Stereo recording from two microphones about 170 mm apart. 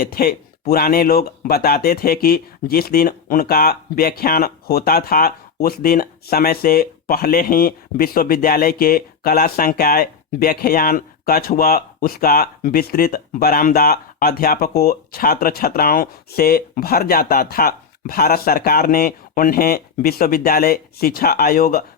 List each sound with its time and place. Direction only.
0.0 s speech: 65° left (ahead or behind)